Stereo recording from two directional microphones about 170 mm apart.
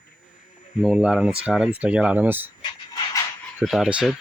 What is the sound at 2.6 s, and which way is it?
Pant, 25° left (ahead or behind).